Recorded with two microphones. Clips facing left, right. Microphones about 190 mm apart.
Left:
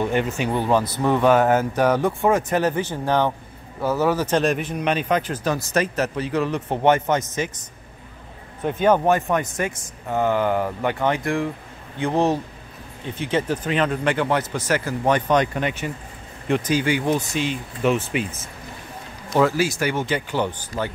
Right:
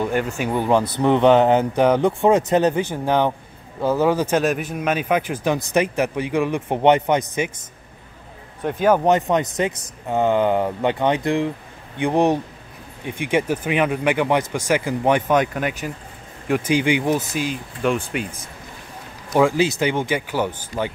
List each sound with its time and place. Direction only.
0.0 s speech: 5° right (ahead or behind)
4.4 s speech: centre (ahead or behind)
8.6 s speech: 5° right (ahead or behind)
9.0 s speech: 20° right (ahead or behind)
17.3 s speech: centre (ahead or behind)
19.3 s speech: 15° right (ahead or behind)